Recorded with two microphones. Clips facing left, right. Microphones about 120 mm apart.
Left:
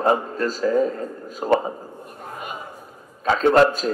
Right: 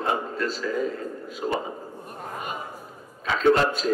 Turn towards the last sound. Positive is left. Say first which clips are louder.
# left 4 dB
turn(degrees=40)  # may be behind; listen again after turning